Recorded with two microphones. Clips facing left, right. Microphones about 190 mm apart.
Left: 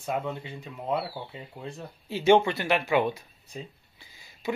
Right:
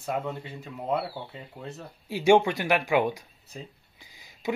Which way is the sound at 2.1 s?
10° right (ahead or behind).